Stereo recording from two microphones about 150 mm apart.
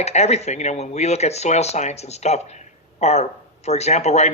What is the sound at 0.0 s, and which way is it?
Speech, 45° left (ahead or behind).